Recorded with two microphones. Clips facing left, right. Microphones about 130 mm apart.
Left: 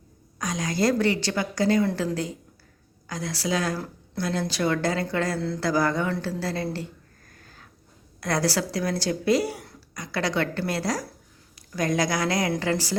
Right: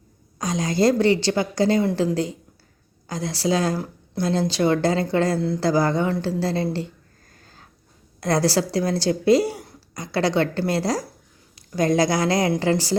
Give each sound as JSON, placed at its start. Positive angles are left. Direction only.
{"t": 0.3, "sound": "a woman's voice", "side_deg": -30}
{"t": 3.1, "sound": "a woman's voice", "side_deg": -30}
{"t": 3.8, "sound": "a woman's voice", "side_deg": -15}
{"t": 4.3, "sound": "a woman's voice", "side_deg": -25}
{"t": 7.4, "sound": "a sound", "side_deg": -30}
{"t": 8.2, "sound": "a woman's voice", "side_deg": -30}